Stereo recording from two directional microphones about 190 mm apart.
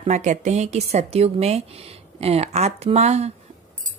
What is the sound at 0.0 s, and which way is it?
A woman's voice, 40° right (ahead or behind).